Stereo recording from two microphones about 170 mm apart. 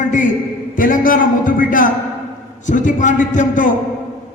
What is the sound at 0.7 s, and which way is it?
A man's voice, 55° left (ahead or behind).